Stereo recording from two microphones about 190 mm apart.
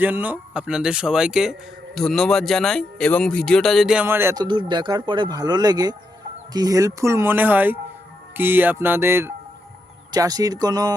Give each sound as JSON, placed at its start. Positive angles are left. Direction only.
{"t": 0.0, "sound": "speech", "side_deg": -10}
{"t": 4.4, "sound": "speech", "side_deg": -25}